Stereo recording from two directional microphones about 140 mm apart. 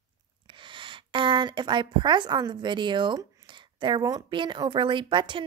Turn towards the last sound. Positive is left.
turn(degrees=-35)  # may be behind; listen again after turning